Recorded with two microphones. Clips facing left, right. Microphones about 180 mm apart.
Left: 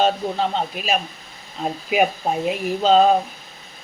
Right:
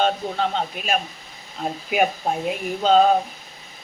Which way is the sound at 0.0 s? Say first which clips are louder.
Left 2 dB; centre (ahead or behind).